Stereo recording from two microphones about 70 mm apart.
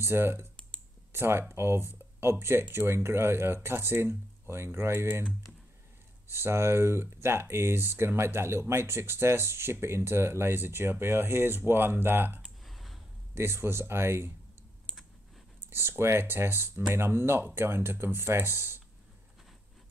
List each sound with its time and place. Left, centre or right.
0.0 s speech: right
6.3 s speech: right
12.6 s a sound: centre
13.3 s speech: right
15.7 s speech: right